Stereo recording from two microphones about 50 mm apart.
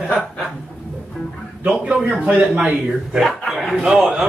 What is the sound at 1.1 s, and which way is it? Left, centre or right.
Speech, centre.